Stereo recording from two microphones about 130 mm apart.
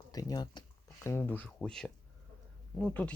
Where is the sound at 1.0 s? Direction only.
20° left (ahead or behind).